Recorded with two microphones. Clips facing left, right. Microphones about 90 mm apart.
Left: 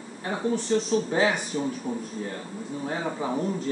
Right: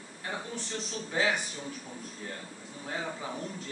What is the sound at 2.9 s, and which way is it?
Speech, 35° left (ahead or behind).